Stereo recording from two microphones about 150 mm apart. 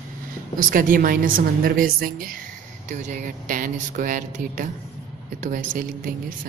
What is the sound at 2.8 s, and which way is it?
A woman's voice, 55° right (ahead or behind).